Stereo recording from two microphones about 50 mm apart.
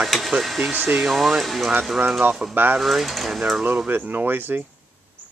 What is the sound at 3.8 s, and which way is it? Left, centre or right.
Speech, right.